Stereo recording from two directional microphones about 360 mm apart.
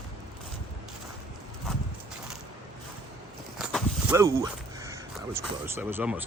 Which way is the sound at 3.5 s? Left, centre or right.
Centre.